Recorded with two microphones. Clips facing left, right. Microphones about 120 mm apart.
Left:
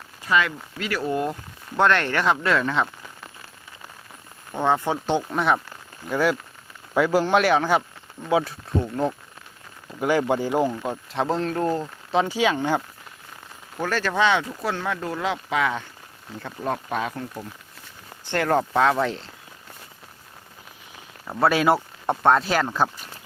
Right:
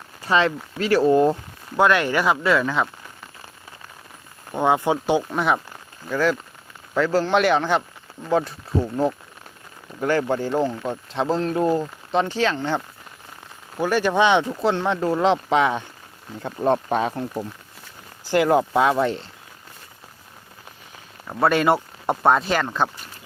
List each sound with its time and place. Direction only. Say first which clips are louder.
0.3 s speech: right 3 dB; 30° right (ahead or behind)
1.7 s speech: right 2 dB; 10° right (ahead or behind)
4.5 s speech: right 3 dB; 10° right (ahead or behind)
5.3 s speech: even; centre (ahead or behind)
6.1 s speech: right 1 dB; 10° left (ahead or behind)
7.3 s speech: right 1 dB; centre (ahead or behind)
10.0 s speech: even; 10° left (ahead or behind); by 11.9 s 10° right (ahead or behind)
12.1 s speech: even; 10° left (ahead or behind)
13.7 s speech: right 4 dB; 15° right (ahead or behind); by 17.4 s 30° right (ahead or behind)
18.3 s speech: right 4 dB; 10° right (ahead or behind)
21.2 s speech: right 1 dB; centre (ahead or behind)